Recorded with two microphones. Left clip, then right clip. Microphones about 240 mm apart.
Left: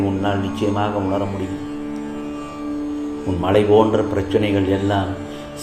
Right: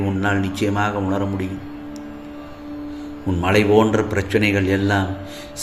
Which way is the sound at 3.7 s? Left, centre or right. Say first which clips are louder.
Left 1 dB; right.